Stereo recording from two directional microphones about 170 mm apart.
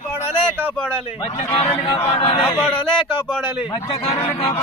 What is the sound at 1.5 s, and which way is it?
Speech, 35° left (ahead or behind).